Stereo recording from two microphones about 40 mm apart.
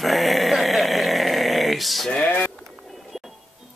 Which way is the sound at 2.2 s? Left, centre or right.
Left.